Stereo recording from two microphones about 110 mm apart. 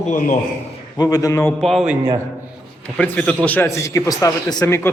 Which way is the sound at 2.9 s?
10° left (ahead or behind).